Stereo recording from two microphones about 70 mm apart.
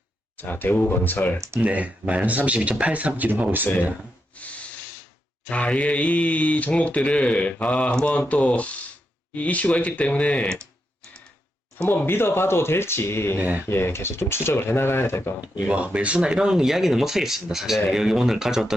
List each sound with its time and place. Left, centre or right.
0.3 s speech: left
1.5 s speech: right
5.5 s speech: centre
11.9 s speech: left
15.4 s speech: centre